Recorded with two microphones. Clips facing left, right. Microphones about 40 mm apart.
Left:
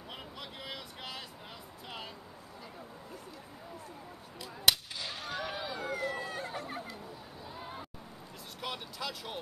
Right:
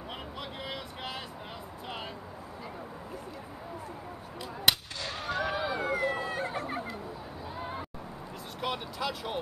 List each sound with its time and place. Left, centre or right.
0.4 s vehicle: centre
4.7 s a sound: centre
5.2 s run: centre
6.4 s chatter: right
7.5 s run: right
8.5 s speech: centre